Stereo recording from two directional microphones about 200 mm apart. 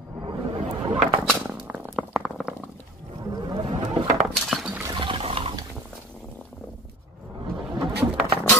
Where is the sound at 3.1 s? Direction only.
20° right (ahead or behind).